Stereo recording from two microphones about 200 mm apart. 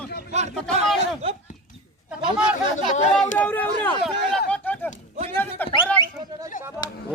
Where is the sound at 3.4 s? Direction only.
10° left (ahead or behind).